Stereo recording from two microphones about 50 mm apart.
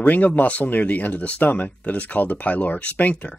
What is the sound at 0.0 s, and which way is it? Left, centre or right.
Speech, left.